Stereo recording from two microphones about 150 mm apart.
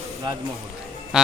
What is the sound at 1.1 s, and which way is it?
Music, 5° right (ahead or behind).